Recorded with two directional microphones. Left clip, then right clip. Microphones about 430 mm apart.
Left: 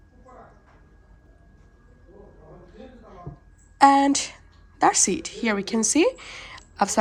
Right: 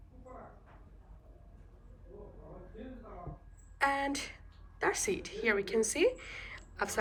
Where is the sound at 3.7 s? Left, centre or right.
Centre.